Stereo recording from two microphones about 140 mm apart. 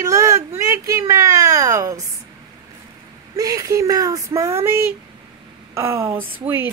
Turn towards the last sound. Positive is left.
turn(degrees=-15)  # may be behind; listen again after turning